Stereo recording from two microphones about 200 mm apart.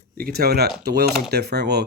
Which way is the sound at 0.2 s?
50° right (ahead or behind).